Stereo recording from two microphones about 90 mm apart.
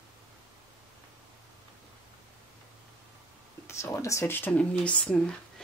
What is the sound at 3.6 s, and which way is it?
Speech, 30° left (ahead or behind).